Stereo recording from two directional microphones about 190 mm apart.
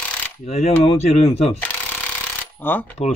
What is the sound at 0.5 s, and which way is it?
Speech, 35° left (ahead or behind).